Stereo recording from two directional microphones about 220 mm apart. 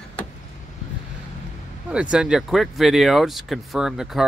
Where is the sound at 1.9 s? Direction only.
5° right (ahead or behind).